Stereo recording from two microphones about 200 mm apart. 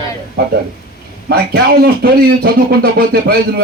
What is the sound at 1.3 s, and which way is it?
Speech, 50° right (ahead or behind).